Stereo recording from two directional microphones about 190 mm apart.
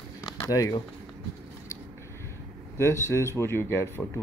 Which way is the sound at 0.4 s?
15° left (ahead or behind).